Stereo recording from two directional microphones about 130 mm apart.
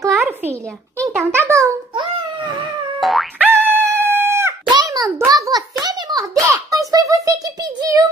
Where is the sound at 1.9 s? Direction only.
35° right (ahead or behind).